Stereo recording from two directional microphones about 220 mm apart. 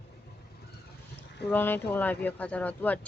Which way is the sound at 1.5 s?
10° left (ahead or behind).